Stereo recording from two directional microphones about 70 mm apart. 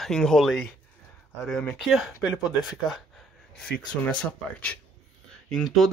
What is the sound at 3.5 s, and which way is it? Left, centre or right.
Speech, centre.